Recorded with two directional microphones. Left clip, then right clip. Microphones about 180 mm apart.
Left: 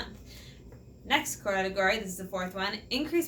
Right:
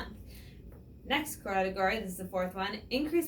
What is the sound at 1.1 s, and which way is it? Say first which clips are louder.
Speech: left 4 dB; 20° left (ahead or behind).